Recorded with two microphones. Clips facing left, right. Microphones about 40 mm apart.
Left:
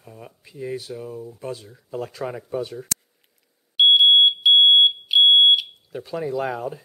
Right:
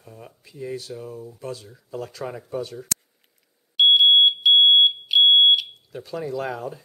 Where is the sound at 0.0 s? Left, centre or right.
Centre.